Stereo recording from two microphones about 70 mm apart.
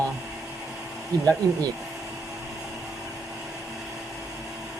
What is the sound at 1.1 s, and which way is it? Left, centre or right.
Speech, right.